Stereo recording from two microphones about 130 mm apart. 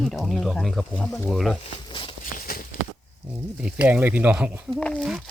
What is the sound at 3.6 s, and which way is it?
Speech, 10° right (ahead or behind).